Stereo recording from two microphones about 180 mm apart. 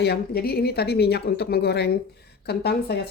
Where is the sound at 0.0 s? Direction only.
60° left (ahead or behind).